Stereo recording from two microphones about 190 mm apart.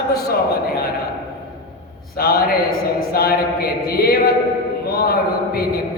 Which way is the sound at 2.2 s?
50° left (ahead or behind).